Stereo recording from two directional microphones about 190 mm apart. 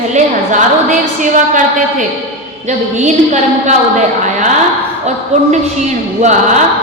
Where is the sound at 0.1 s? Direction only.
40° right (ahead or behind).